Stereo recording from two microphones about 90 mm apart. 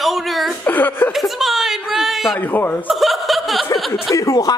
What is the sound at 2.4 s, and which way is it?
Speech, 20° left (ahead or behind).